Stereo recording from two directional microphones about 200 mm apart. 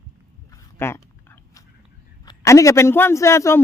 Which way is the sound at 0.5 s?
15° left (ahead or behind).